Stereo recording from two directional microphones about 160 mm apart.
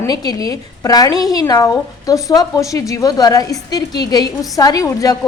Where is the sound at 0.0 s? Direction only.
25° left (ahead or behind).